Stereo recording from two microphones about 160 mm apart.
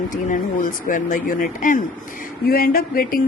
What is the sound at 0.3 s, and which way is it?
Speech, 55° left (ahead or behind).